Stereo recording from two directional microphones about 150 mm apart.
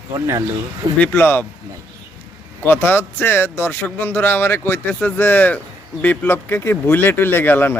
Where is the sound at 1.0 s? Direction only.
15° left (ahead or behind).